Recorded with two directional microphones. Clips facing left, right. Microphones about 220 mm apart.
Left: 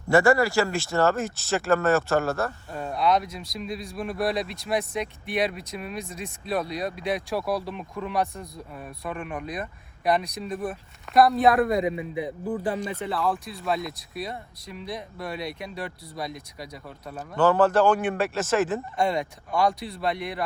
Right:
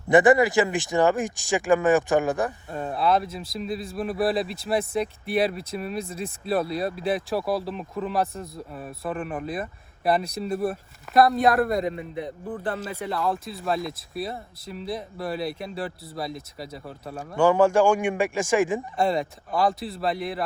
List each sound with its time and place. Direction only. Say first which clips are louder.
0.1 s speech: right 3 dB; 20° right (ahead or behind)
2.7 s speech: even; centre (ahead or behind)
4.8 s speech: right 4 dB; 30° right (ahead or behind)
6.4 s speech: right 3 dB; 5° right (ahead or behind)
6.7 s speech: right 2 dB; 30° right (ahead or behind)
7.3 s speech: right 2 dB; centre (ahead or behind)
19.0 s speech: right 3 dB; centre (ahead or behind)